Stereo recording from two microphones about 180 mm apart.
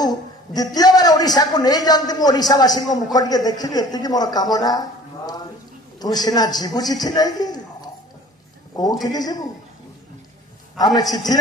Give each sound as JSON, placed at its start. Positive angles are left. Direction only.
{"t": 0.6, "sound": "a man's voice", "side_deg": 20}
{"t": 10.8, "sound": "a man's voice", "side_deg": 20}